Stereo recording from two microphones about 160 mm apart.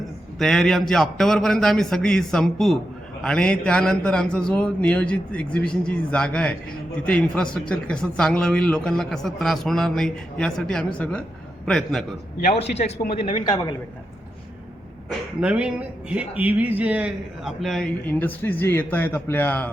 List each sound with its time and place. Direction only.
0.3 s a man's voice: centre (ahead or behind)
12.5 s a man's voice: 40° left (ahead or behind); by 13.7 s 25° left (ahead or behind)
15.4 s a man's voice: 5° right (ahead or behind)
17.6 s a man's voice: centre (ahead or behind)